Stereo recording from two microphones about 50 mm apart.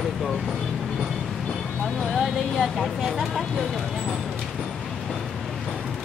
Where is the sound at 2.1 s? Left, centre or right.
Centre.